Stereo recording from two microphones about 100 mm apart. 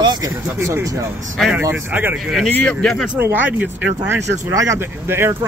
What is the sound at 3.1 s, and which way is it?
Speech, 20° right (ahead or behind).